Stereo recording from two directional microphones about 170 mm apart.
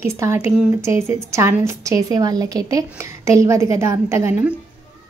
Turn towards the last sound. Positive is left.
turn(degrees=-15)  # may be behind; listen again after turning